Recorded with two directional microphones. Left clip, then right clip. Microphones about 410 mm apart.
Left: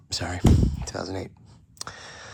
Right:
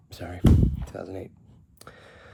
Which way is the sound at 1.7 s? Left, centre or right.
Centre.